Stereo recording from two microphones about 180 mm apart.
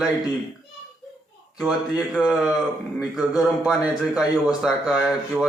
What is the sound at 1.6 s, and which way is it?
A man's voice, 5° right (ahead or behind).